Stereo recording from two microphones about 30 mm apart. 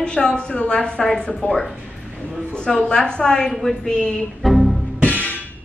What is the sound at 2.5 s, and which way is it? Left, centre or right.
A woman's voice, left.